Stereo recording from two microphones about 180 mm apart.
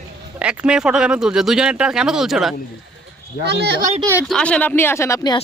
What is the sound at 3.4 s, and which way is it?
Speech, 70° right (ahead or behind).